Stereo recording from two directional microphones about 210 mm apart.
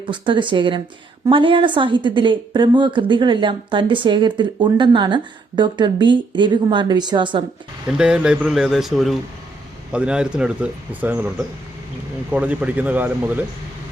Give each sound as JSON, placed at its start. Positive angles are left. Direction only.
{"t": 0.0, "sound": "a woman's voice", "side_deg": -25}
{"t": 7.9, "sound": "a man's voice", "side_deg": -5}